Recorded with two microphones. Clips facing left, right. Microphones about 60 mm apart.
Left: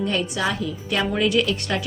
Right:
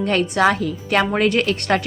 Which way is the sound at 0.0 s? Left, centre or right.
Right.